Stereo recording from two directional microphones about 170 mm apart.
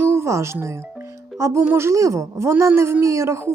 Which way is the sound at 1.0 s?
15° right (ahead or behind).